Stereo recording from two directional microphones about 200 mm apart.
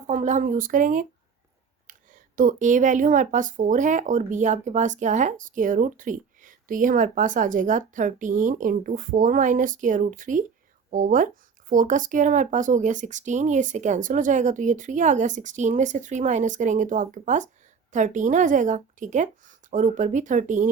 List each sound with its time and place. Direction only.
0.1 s a woman's voice: 35° right (ahead or behind)